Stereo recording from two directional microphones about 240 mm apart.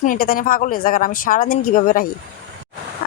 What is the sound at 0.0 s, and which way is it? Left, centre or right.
Speech, left.